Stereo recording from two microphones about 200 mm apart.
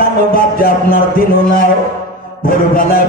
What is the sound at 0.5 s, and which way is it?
Music, 45° left (ahead or behind).